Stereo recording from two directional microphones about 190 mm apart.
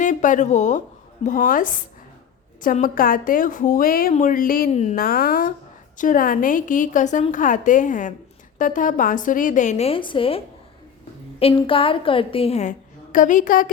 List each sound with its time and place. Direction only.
0.0 s a woman's voice: 40° left (ahead or behind)
4.7 s a woman's voice: 35° left (ahead or behind)
4.9 s a woman's voice: 50° left (ahead or behind)